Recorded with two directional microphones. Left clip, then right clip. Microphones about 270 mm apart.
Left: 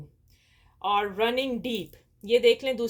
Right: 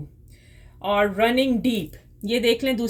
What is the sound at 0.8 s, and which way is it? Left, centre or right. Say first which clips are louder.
Speech: right 5 dB; left.